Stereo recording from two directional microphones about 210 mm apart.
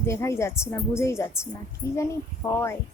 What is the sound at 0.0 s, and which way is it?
A woman's voice, 15° left (ahead or behind).